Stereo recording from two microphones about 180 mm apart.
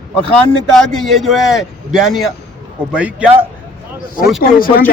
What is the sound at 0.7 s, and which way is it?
A man's voice, 5° left (ahead or behind).